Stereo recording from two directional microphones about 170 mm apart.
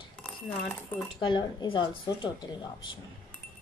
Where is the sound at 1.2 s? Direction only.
30° left (ahead or behind).